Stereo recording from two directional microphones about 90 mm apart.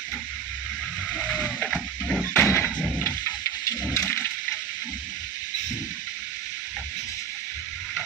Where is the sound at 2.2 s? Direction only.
25° left (ahead or behind).